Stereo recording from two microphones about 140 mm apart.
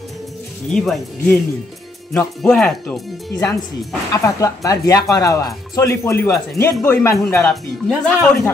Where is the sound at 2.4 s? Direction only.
5° left (ahead or behind).